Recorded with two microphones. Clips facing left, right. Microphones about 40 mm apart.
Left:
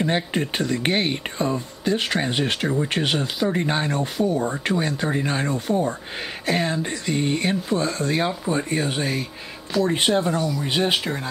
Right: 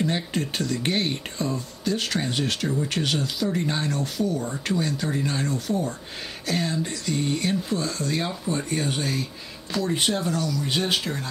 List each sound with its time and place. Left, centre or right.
0.0 s speech: left